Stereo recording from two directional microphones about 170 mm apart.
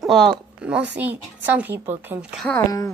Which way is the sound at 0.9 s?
10° right (ahead or behind).